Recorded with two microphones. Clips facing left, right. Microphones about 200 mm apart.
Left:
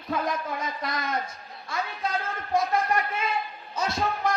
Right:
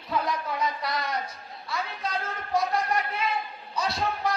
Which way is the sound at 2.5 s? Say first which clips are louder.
Left 2 dB; 50° left (ahead or behind).